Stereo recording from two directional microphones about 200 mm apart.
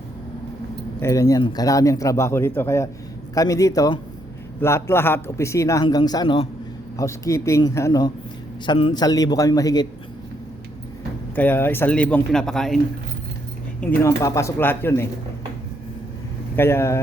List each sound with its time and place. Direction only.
0.9 s a man's voice: 15° left (ahead or behind)
6.9 s a man's voice: 15° left (ahead or behind)
11.3 s a man's voice: 10° left (ahead or behind)
13.8 s a man's voice: 10° left (ahead or behind)
16.6 s a man's voice: 10° left (ahead or behind)